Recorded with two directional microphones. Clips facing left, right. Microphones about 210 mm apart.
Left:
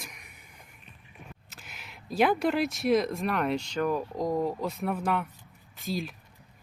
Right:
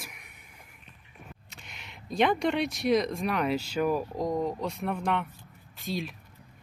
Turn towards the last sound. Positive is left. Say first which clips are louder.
# left 1 dB
turn(degrees=0)  # may be behind; listen again after turning